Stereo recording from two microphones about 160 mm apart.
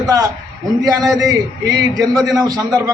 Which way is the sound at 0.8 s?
20° right (ahead or behind).